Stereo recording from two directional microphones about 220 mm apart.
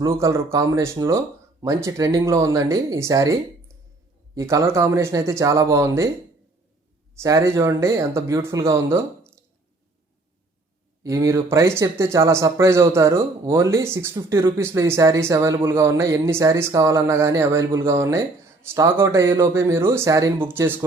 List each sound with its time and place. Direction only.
0.0 s speech: 15° right (ahead or behind)
4.4 s speech: 15° right (ahead or behind)
7.2 s speech: 15° right (ahead or behind)
11.0 s speech: 15° right (ahead or behind)